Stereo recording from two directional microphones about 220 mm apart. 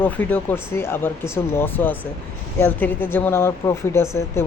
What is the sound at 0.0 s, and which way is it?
Speech, 5° left (ahead or behind).